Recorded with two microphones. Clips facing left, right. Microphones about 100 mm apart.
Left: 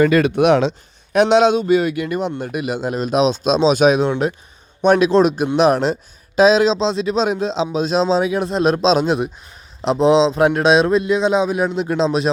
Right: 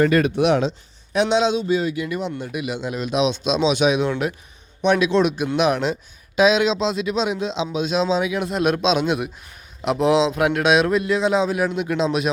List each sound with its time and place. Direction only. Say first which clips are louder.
0.1 s speech: left 4 dB; 85° left; by 0.7 s 65° left (ahead or behind)
1.1 s speech: left 6 dB; 55° left (ahead or behind)
4.0 s a man's voice: left 4 dB; 30° left (ahead or behind)
4.8 s a man's voice: left 5 dB; 45° left (ahead or behind)